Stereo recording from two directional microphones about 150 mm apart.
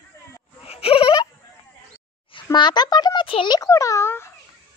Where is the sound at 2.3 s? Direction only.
30° left (ahead or behind).